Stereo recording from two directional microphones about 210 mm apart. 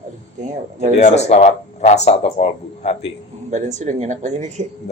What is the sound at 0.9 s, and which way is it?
Speech, 30° left (ahead or behind).